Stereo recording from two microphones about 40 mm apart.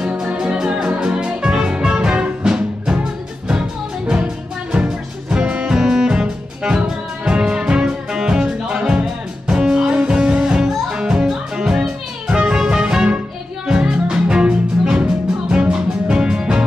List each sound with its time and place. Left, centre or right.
0.4 s music: centre
4.7 s music: right
5.8 s music: centre